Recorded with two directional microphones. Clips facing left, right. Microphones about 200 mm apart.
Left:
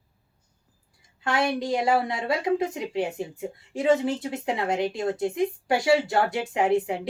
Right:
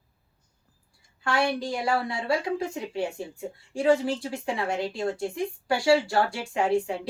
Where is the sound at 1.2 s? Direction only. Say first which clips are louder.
Left 1 dB; 20° left (ahead or behind).